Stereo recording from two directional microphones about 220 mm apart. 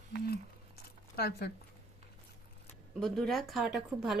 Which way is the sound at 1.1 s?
45° left (ahead or behind).